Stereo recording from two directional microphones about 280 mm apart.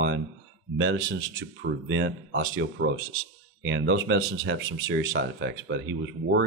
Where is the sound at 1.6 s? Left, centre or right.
Right.